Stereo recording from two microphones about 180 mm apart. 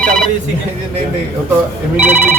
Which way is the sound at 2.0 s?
10° right (ahead or behind).